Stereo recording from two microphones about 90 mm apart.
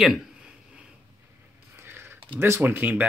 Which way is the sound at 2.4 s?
25° right (ahead or behind).